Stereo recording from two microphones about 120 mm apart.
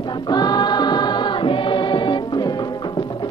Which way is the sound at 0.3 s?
35° left (ahead or behind).